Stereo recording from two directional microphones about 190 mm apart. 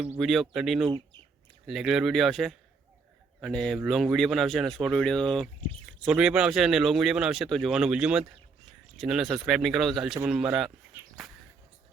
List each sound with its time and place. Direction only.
0.0 s speech: 5° right (ahead or behind)
0.9 s bird: 25° right (ahead or behind)
1.6 s speech: centre (ahead or behind)